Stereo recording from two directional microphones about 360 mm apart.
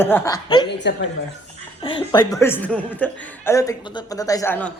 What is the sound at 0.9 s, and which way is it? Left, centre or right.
Speech, left.